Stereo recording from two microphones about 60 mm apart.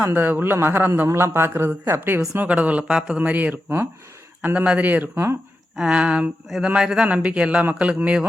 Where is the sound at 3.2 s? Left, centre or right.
Right.